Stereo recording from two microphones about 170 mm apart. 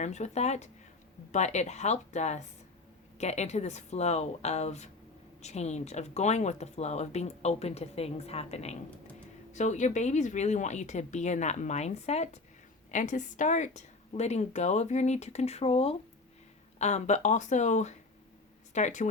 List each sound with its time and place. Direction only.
0.0 s speech: 40° left (ahead or behind)